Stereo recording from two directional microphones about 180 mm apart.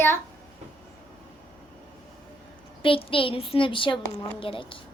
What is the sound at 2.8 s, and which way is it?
A child's voice, 30° left (ahead or behind).